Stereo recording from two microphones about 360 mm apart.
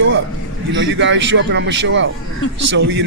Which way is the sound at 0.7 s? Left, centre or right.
Right.